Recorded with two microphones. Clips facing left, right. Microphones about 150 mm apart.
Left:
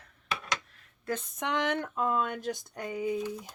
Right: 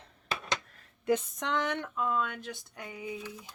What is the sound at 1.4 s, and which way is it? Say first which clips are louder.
Speech: left 1 dB; 15° left (ahead or behind).